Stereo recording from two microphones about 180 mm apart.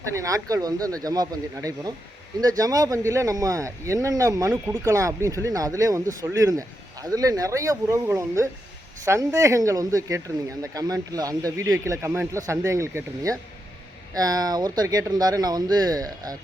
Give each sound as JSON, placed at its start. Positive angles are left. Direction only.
{"t": 0.1, "sound": "speech", "side_deg": -15}